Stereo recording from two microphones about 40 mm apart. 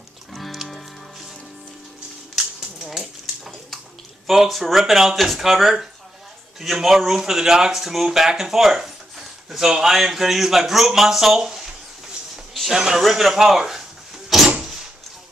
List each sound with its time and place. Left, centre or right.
0.3 s music: centre
2.3 s typewriter: centre
4.3 s speech: centre
12.7 s speech: centre
13.0 s door: centre